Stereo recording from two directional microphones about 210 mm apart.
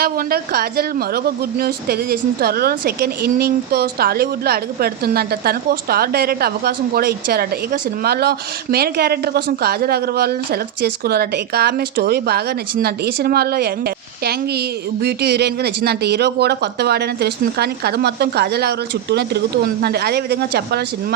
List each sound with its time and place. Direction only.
0.0 s speech: 45° right (ahead or behind)